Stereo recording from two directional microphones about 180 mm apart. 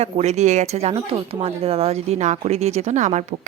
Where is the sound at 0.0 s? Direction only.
40° right (ahead or behind).